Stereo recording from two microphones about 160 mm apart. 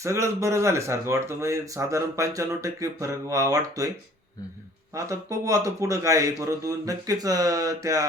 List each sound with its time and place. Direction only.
0.0 s speech: 20° right (ahead or behind)
4.9 s speech: 20° right (ahead or behind)